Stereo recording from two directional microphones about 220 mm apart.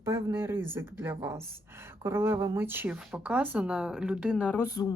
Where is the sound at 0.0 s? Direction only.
10° right (ahead or behind).